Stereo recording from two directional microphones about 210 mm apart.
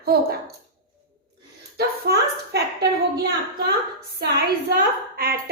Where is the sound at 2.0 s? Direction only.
50° right (ahead or behind).